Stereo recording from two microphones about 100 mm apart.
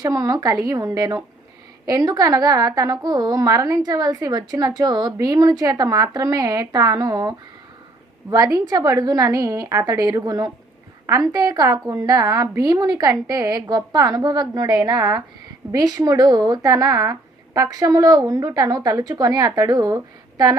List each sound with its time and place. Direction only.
0.0 s a woman's voice: 40° right (ahead or behind)